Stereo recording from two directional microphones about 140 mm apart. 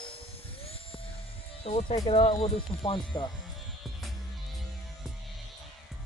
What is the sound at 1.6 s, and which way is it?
Speech, 45° left (ahead or behind).